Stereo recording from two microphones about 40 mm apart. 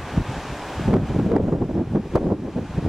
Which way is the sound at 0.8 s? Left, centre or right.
Centre.